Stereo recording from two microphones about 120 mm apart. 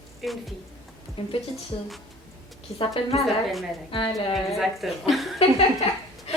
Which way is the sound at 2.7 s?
55° left (ahead or behind).